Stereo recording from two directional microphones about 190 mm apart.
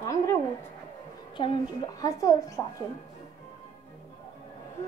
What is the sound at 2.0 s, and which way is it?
Speech, 15° left (ahead or behind).